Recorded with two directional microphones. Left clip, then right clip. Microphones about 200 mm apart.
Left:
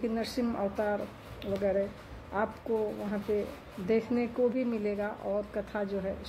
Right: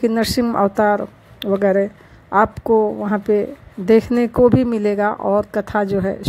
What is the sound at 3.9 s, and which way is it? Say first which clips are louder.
Speech: right 15 dB; 40° right (ahead or behind).